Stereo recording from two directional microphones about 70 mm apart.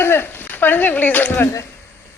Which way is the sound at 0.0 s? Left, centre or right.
Left.